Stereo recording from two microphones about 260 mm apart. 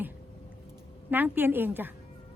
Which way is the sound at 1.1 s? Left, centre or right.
Centre.